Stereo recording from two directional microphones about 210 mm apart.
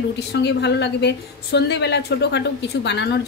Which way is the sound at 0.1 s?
55° left (ahead or behind).